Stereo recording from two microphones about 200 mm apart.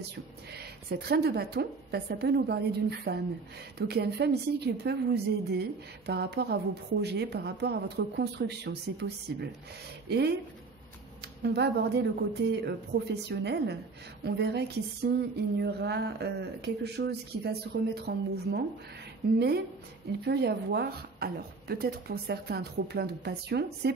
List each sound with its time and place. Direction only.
0.1 s a woman's voice: 55° right (ahead or behind)
11.4 s a woman's voice: 55° right (ahead or behind)